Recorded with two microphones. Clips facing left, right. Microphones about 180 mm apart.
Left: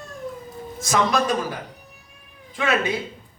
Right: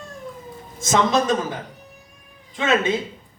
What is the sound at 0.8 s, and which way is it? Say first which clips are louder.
Speech: right 2 dB; 20° right (ahead or behind).